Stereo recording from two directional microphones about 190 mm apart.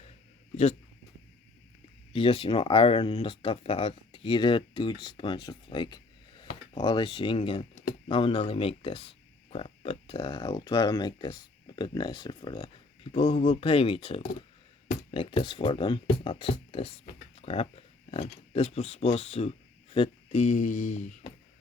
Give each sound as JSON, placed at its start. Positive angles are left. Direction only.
{"t": 0.5, "sound": "speech", "side_deg": 35}
{"t": 2.1, "sound": "speech", "side_deg": 30}